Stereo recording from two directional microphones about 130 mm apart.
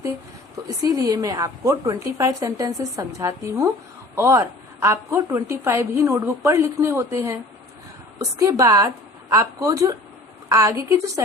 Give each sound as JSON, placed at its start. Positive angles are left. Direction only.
{"t": 0.8, "sound": "a woman's voice", "side_deg": -25}